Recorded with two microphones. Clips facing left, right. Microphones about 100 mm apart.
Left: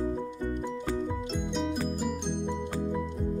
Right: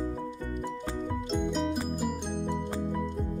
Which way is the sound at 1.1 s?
Centre (ahead or behind).